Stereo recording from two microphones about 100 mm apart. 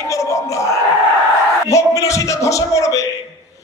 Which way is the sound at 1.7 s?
30° left (ahead or behind).